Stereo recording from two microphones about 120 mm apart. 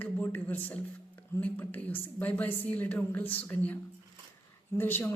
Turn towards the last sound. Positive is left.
turn(degrees=15)  # may be behind; listen again after turning